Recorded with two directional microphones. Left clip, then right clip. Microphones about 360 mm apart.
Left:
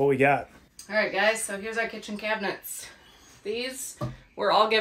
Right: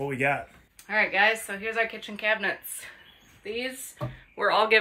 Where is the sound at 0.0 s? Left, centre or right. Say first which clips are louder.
Left 5 dB; centre.